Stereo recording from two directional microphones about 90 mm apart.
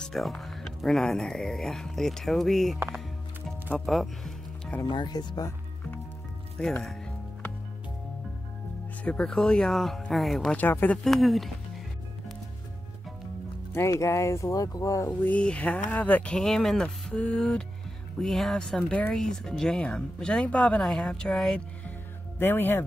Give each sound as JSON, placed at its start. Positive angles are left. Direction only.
{"t": 0.0, "sound": "speech", "side_deg": 5}
{"t": 3.8, "sound": "speech", "side_deg": 0}
{"t": 4.8, "sound": "speech", "side_deg": 55}
{"t": 6.6, "sound": "speech", "side_deg": 5}
{"t": 9.0, "sound": "speech", "side_deg": 10}
{"t": 10.5, "sound": "speech", "side_deg": 20}
{"t": 11.1, "sound": "speech", "side_deg": 0}
{"t": 13.7, "sound": "speech", "side_deg": 35}
{"t": 15.0, "sound": "speech", "side_deg": 15}
{"t": 16.3, "sound": "speech", "side_deg": 5}
{"t": 22.4, "sound": "speech", "side_deg": 25}